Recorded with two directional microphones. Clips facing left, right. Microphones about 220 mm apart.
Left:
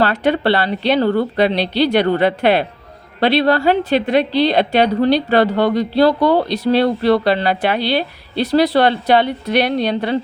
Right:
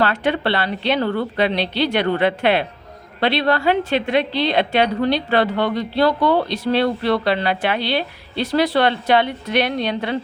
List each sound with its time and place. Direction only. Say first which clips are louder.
0.0 s a woman's voice: left 4 dB; 35° left (ahead or behind)